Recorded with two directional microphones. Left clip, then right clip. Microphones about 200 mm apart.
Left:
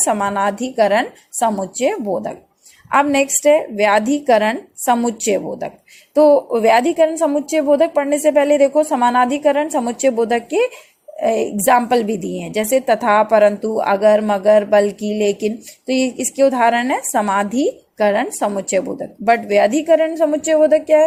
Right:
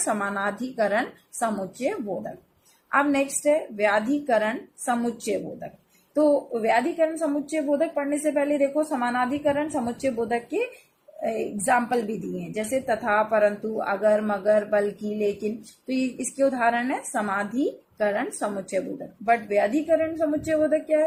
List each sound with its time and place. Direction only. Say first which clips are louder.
0.0 s a woman's voice: left 9 dB; 25° left (ahead or behind)